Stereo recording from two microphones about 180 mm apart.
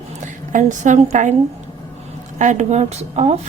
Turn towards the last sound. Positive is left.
turn(degrees=-35)  # may be behind; listen again after turning